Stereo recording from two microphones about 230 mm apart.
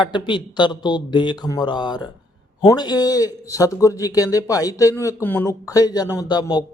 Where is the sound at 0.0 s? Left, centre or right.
Centre.